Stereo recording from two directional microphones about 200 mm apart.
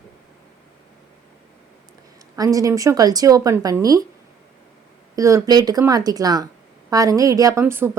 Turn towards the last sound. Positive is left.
turn(degrees=-10)  # may be behind; listen again after turning